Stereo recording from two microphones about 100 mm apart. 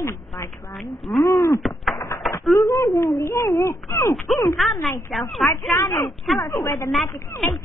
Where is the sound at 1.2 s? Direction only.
30° left (ahead or behind).